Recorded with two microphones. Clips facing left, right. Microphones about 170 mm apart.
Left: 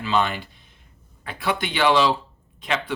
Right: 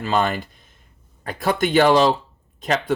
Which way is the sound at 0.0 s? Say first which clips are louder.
Right 2 dB; 45° right (ahead or behind).